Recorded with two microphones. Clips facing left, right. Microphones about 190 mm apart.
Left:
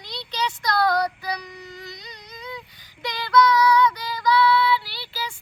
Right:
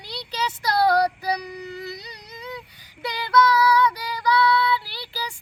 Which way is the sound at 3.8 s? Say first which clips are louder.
Left 1 dB; 10° right (ahead or behind).